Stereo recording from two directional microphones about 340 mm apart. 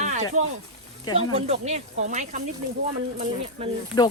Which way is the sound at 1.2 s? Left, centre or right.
Centre.